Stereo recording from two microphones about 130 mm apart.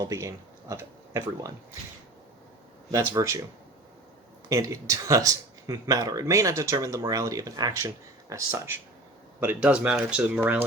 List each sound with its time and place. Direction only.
0.0 s speech: 25° right (ahead or behind)
3.1 s speech: 25° right (ahead or behind)
4.4 s speech: 25° right (ahead or behind)